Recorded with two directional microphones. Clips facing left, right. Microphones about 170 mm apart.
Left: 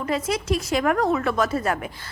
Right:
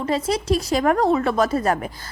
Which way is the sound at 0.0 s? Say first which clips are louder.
Right 3 dB; 35° right (ahead or behind).